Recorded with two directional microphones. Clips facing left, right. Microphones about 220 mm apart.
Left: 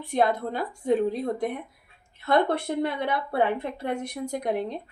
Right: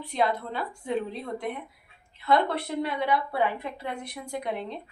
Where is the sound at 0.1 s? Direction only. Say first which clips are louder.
Left 4 dB; 50° left (ahead or behind).